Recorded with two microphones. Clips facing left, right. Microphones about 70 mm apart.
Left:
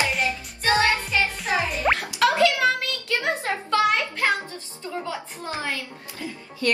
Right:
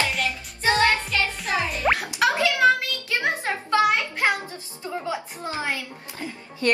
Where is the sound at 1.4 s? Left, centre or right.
Centre.